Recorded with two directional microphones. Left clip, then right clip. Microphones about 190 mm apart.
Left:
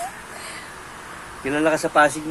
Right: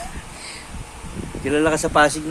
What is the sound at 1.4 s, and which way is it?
Speech, 35° right (ahead or behind).